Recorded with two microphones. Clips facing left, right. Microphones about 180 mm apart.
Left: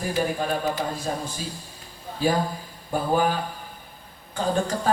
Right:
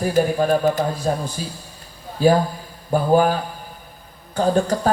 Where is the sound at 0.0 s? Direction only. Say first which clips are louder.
Right 7 dB; 45° right (ahead or behind).